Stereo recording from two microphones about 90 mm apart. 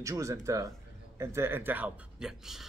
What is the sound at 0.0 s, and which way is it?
A man's voice, 35° right (ahead or behind).